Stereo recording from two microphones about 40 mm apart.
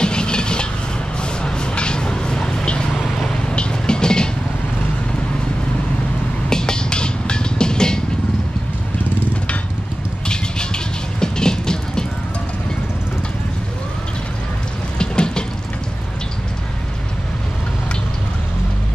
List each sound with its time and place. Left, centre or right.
0.0 s vehicle: left
6.5 s music: centre
10.2 s vehicle: left
15.0 s a sound: centre